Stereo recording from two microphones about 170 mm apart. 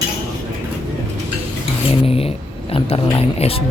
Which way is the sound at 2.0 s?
35° left (ahead or behind).